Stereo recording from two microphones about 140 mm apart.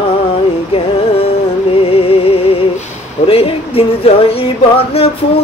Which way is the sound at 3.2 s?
45° left (ahead or behind).